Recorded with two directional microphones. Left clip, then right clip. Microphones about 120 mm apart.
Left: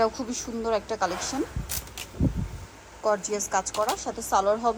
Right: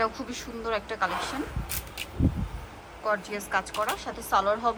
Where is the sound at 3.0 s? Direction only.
40° left (ahead or behind).